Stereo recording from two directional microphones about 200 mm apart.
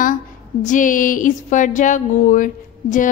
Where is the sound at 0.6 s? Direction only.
40° left (ahead or behind).